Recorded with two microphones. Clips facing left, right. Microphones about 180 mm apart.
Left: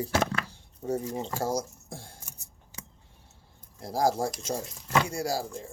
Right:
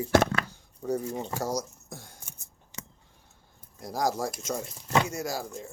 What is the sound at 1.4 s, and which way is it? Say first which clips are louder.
Speech: left 1 dB; 30° left (ahead or behind).